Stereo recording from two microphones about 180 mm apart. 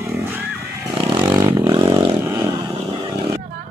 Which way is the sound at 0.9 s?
25° right (ahead or behind).